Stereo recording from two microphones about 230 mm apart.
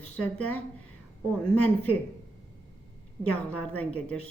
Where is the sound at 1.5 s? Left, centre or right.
Left.